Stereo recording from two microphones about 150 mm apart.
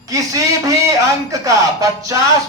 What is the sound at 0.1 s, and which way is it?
A man's voice, 20° right (ahead or behind).